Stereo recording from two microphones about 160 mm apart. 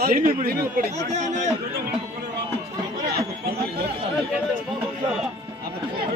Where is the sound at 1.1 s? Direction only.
45° right (ahead or behind).